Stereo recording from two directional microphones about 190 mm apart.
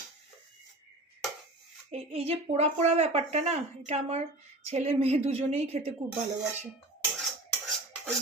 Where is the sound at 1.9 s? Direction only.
30° right (ahead or behind).